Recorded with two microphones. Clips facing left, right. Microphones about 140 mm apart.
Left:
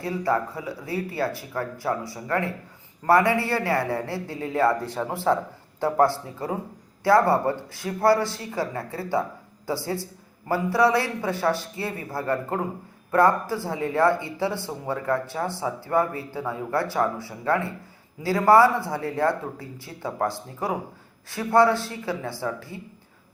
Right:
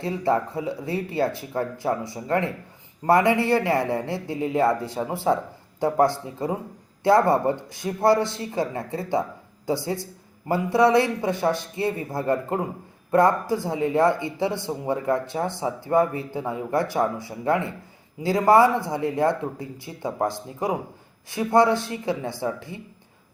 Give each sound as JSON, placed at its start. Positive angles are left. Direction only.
{"t": 0.0, "sound": "a man's voice", "side_deg": -25}